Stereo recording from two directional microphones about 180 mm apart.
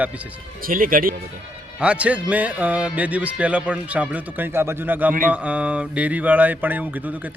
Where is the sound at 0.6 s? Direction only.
50° right (ahead or behind).